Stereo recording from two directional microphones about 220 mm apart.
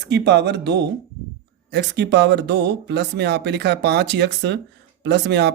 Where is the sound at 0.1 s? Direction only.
50° right (ahead or behind).